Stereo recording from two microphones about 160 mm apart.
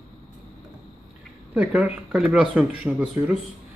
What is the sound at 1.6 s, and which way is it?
Speech, 5° right (ahead or behind).